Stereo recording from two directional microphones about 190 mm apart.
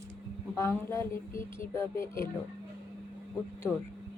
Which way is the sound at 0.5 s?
15° left (ahead or behind).